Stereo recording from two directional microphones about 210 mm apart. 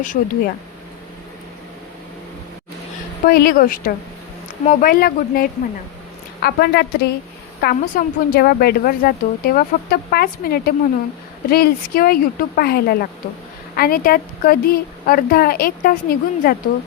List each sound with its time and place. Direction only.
0.0 s speech: 35° left (ahead or behind)
3.2 s a woman's voice: 45° left (ahead or behind)